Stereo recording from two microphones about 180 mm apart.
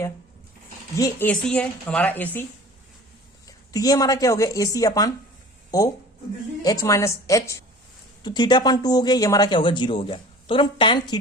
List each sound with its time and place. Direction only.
0.9 s speech: 20° left (ahead or behind)
1.3 s speech: 5° left (ahead or behind)
3.4 s speech: 20° left (ahead or behind)
6.6 s speech: 20° left (ahead or behind)